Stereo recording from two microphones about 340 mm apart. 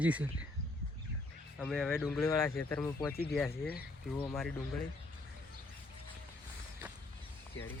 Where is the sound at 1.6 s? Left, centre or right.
Centre.